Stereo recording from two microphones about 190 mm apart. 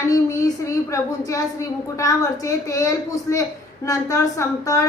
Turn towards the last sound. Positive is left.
turn(degrees=15)  # may be behind; listen again after turning